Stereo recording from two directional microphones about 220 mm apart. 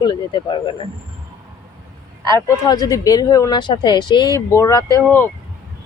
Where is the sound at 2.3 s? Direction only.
15° left (ahead or behind).